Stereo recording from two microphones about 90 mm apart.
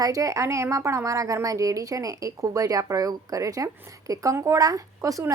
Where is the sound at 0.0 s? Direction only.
40° right (ahead or behind).